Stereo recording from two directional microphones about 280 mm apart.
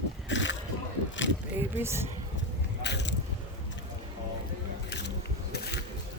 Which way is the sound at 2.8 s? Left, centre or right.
Left.